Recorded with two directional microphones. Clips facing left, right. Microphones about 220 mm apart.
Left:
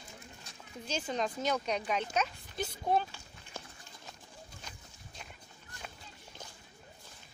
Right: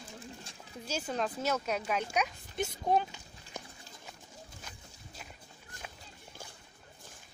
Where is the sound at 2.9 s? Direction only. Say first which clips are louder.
Right 1 dB; 15° right (ahead or behind).